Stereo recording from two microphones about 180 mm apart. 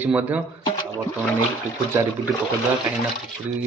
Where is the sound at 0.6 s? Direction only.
25° left (ahead or behind).